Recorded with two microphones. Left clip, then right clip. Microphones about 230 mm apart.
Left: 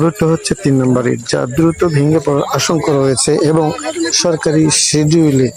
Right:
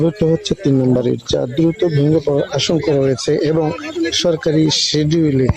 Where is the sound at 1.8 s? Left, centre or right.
Left.